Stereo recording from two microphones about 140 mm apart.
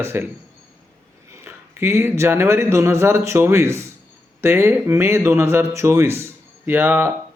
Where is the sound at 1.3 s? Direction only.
20° right (ahead or behind).